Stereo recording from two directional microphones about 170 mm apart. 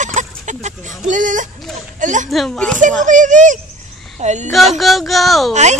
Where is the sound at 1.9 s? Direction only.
45° right (ahead or behind).